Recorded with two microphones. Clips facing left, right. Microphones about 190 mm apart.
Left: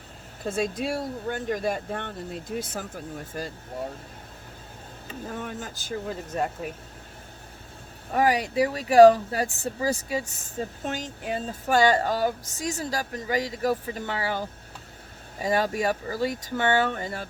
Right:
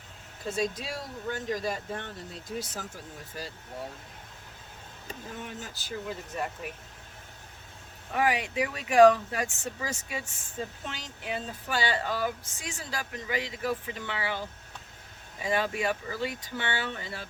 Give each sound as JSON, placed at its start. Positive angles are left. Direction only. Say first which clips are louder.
{"t": 0.4, "sound": "speech", "louder": "left 4 dB", "side_deg": 55}
{"t": 5.3, "sound": "speech", "louder": "left 6 dB", "side_deg": 50}
{"t": 8.1, "sound": "speech", "louder": "left 5 dB", "side_deg": 40}